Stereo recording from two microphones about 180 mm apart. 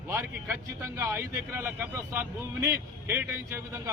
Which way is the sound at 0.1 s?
10° right (ahead or behind).